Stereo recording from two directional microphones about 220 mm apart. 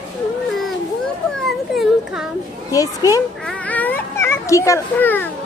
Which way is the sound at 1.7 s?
Centre (ahead or behind).